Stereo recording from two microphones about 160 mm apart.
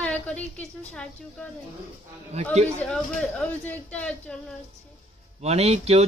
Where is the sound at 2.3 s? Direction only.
40° right (ahead or behind).